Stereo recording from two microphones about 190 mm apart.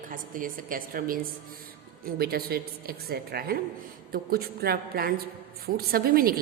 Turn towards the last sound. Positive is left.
turn(degrees=-50)  # may be behind; listen again after turning